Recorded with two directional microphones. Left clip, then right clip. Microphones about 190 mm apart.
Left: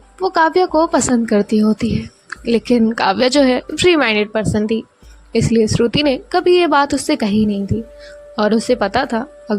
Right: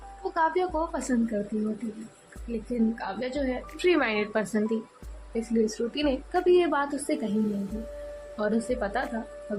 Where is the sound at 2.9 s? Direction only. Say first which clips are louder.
Left 18 dB; 45° left (ahead or behind).